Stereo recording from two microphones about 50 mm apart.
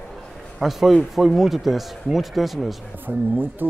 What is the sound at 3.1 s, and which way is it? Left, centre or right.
Speech, right.